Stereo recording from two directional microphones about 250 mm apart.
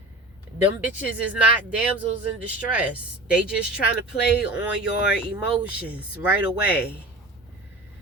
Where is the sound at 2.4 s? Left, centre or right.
Centre.